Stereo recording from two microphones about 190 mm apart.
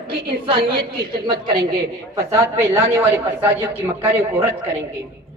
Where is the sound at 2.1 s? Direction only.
15° right (ahead or behind).